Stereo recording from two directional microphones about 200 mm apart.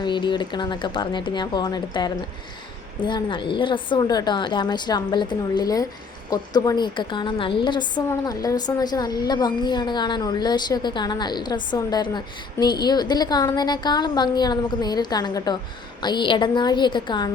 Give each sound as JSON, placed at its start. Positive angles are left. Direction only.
{"t": 0.0, "sound": "a woman's voice", "side_deg": 25}